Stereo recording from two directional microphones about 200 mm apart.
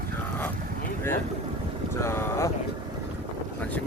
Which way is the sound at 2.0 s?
15° left (ahead or behind).